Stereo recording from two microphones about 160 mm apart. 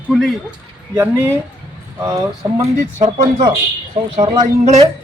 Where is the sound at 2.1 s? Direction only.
20° right (ahead or behind).